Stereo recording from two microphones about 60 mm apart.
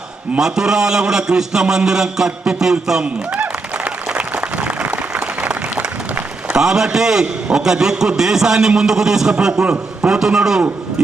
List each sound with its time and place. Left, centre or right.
0.3 s a man's voice: centre
3.0 s applause: right
6.6 s a man's voice: centre